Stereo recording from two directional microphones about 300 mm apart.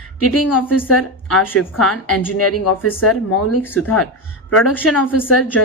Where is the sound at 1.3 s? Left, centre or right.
Centre.